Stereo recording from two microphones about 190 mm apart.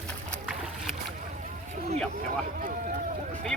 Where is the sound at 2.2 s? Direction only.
40° right (ahead or behind).